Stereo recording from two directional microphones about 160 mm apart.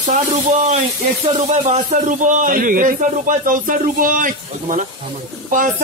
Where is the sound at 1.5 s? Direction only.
45° right (ahead or behind).